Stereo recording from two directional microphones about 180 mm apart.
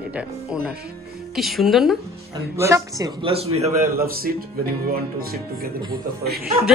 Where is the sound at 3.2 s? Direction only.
30° right (ahead or behind).